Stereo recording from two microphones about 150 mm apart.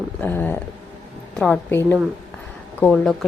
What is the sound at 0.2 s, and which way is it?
Speech, 10° left (ahead or behind).